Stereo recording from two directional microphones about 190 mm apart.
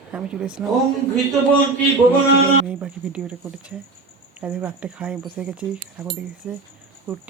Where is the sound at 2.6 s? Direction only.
5° right (ahead or behind).